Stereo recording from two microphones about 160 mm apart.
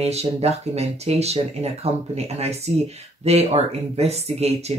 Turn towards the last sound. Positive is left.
turn(degrees=-40)  # may be behind; listen again after turning